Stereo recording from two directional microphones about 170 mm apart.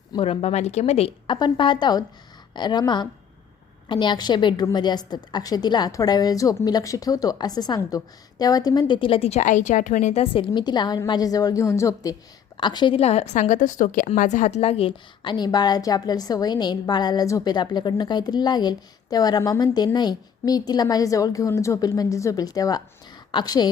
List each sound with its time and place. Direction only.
0.1 s a woman's voice: 30° left (ahead or behind)